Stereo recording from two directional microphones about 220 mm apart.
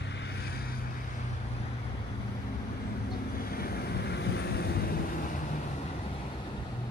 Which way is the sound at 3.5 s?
45° left (ahead or behind).